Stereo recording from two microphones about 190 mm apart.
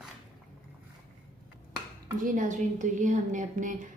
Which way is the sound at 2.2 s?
45° right (ahead or behind).